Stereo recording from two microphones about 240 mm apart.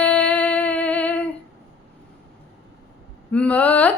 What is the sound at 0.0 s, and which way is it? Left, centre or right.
Music, centre.